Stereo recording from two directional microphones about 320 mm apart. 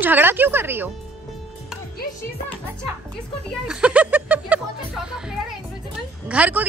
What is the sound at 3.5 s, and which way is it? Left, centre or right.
Music, centre.